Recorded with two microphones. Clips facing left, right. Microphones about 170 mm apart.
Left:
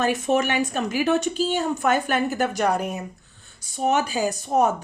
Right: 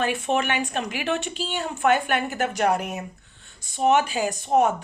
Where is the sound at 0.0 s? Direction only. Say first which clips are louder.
Left 3 dB; 40° left (ahead or behind).